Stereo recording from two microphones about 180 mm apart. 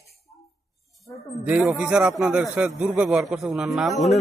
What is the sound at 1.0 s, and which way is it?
A man's voice, centre (ahead or behind).